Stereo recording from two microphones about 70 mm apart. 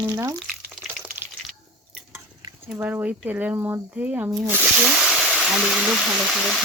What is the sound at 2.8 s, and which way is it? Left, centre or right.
Speech, right.